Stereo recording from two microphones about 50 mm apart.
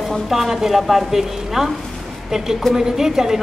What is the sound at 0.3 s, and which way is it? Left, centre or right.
A woman's voice, centre.